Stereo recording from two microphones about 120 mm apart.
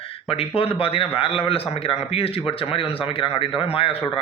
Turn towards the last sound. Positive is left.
turn(degrees=50)  # may be behind; listen again after turning